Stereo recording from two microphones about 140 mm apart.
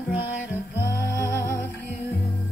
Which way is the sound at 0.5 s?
20° left (ahead or behind).